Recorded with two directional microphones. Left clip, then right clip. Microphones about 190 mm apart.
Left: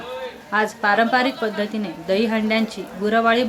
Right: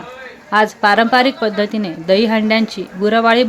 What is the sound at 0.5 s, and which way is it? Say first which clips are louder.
A woman's voice: right 6 dB; 35° right (ahead or behind).